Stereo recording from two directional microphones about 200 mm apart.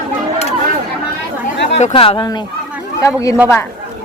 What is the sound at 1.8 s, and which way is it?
A woman's voice, 25° left (ahead or behind).